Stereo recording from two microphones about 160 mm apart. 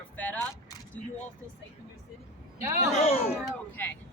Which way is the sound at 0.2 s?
10° left (ahead or behind).